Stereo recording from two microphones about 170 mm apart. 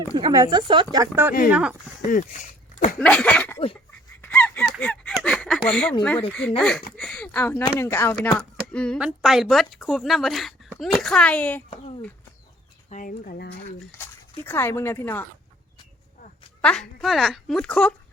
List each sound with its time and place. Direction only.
0.1 s speech: 25° right (ahead or behind); by 1.7 s 5° right (ahead or behind)
2.0 s speech: 50° left (ahead or behind)
3.0 s speech: 5° left (ahead or behind)
4.2 s honk: 10° left (ahead or behind)
5.2 s a woman's voice: 5° left (ahead or behind)
6.9 s a sound: 5° left (ahead or behind)
7.6 s a woman's voice: 15° left (ahead or behind)
11.7 s speech: 35° left (ahead or behind)
12.9 s speech: 50° left (ahead or behind)
13.9 s speech: 15° left (ahead or behind)
16.6 s a woman's voice: 5° left (ahead or behind)